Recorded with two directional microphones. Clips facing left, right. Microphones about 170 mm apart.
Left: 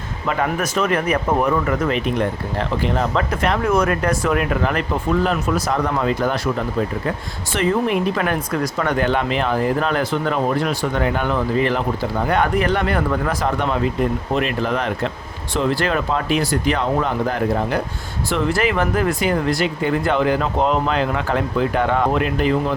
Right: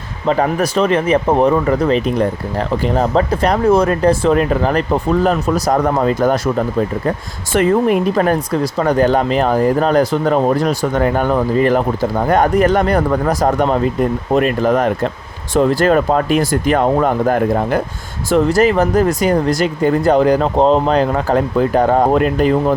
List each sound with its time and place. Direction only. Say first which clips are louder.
0.3 s speech: right 6 dB; 35° right (ahead or behind)